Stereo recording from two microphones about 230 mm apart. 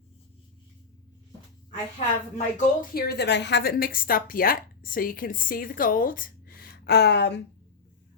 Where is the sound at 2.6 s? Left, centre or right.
Left.